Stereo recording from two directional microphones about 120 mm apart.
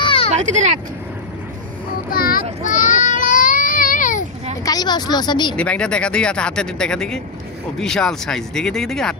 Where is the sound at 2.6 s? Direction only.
90° left.